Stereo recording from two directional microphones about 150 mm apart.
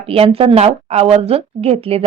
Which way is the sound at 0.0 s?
40° right (ahead or behind).